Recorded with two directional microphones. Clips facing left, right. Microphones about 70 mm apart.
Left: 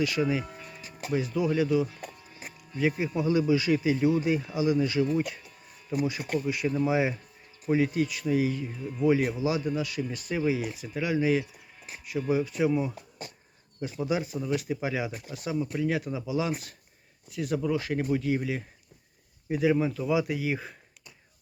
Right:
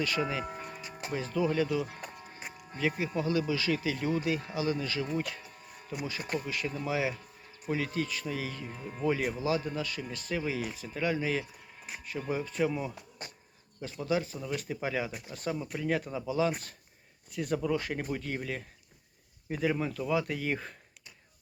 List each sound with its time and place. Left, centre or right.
0.0 s speech: centre
0.4 s music: right
1.1 s speech: centre
1.9 s music: right
3.2 s speech: left
6.1 s speech: centre
8.7 s speech: right
9.0 s speech: centre